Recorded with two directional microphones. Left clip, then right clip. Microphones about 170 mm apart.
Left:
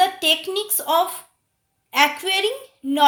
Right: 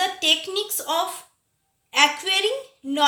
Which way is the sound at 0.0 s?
50° left (ahead or behind).